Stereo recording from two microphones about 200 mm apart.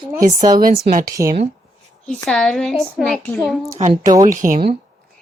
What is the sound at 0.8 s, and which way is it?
Speech, 45° right (ahead or behind).